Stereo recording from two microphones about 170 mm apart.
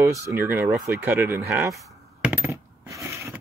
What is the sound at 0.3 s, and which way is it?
Speech, 10° right (ahead or behind).